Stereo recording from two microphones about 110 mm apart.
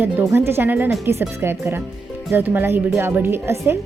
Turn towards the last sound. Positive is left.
turn(degrees=-20)  # may be behind; listen again after turning